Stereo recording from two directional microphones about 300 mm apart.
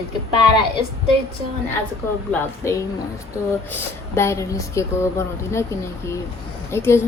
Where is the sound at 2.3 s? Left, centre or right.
Centre.